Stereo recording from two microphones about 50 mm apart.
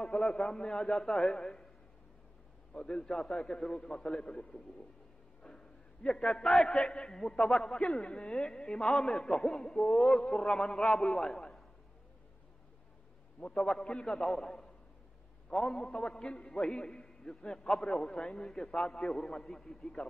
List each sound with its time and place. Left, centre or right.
0.0 s speech: centre
2.7 s speech: centre
5.4 s a sound: centre
6.3 s speech: centre
13.4 s speech: centre